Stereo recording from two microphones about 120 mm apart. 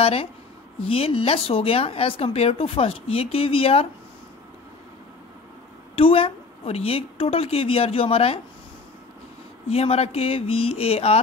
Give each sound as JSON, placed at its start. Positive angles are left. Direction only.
{"t": 0.0, "sound": "speech", "side_deg": 55}
{"t": 5.9, "sound": "speech", "side_deg": 50}
{"t": 9.7, "sound": "speech", "side_deg": 60}